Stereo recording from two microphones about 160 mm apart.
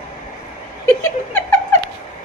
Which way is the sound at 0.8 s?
15° left (ahead or behind).